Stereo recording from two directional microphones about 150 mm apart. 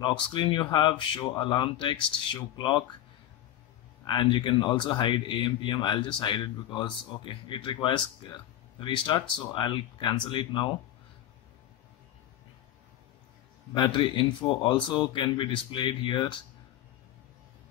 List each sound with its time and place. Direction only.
0.0 s speech: 30° left (ahead or behind)
4.0 s speech: 30° left (ahead or behind)
13.7 s speech: 30° left (ahead or behind)